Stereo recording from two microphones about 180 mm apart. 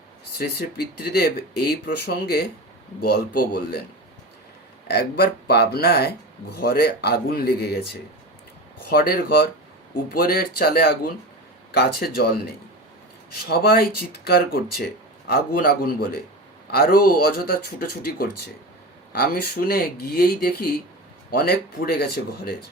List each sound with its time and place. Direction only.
0.3 s speech: 60° left (ahead or behind)
4.9 s speech: 60° left (ahead or behind)
8.9 s speech: 55° left (ahead or behind)
13.5 s speech: 60° left (ahead or behind)